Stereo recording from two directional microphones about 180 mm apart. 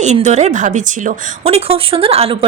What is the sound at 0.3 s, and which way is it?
Speech, 40° right (ahead or behind).